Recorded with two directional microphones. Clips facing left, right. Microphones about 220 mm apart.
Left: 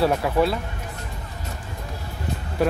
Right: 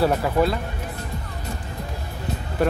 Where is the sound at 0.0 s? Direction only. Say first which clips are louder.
Even; centre (ahead or behind).